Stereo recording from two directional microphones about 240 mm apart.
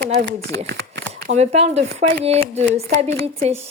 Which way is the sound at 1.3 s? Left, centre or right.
Right.